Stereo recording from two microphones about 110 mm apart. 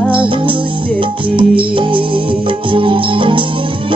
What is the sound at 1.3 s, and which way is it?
Music, 50° right (ahead or behind).